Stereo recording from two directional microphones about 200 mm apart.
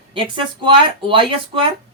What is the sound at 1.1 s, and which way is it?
Speech, 25° right (ahead or behind).